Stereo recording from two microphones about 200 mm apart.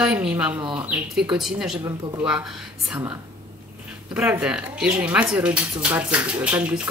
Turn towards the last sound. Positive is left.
turn(degrees=-5)  # may be behind; listen again after turning